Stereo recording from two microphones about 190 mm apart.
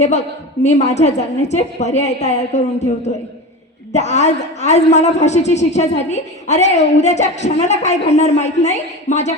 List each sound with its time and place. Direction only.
0.0 s a man's voice: 35° left (ahead or behind)